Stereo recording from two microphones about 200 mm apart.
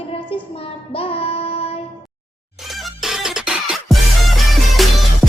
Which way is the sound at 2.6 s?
Centre (ahead or behind).